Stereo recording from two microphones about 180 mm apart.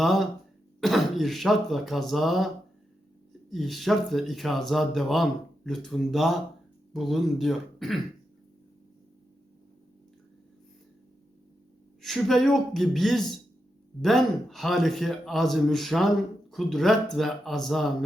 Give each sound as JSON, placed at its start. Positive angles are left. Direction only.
{"t": 0.0, "sound": "a man's voice", "side_deg": 0}
{"t": 3.5, "sound": "a man's voice", "side_deg": 0}
{"t": 12.0, "sound": "a man's voice", "side_deg": 0}